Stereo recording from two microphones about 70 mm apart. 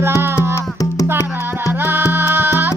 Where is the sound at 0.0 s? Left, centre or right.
Right.